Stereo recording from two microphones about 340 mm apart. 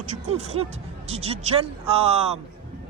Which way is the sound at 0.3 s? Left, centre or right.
Centre.